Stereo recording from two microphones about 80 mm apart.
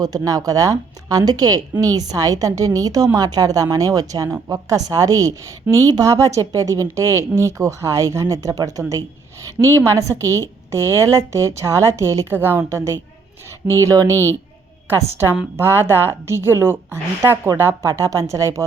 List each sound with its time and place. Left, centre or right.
0.0 s a woman's voice: right